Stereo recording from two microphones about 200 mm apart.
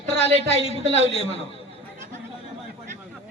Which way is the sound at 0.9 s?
30° left (ahead or behind).